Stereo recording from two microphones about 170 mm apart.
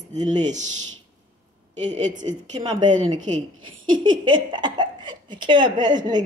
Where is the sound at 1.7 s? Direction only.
45° right (ahead or behind); by 2.8 s 30° right (ahead or behind).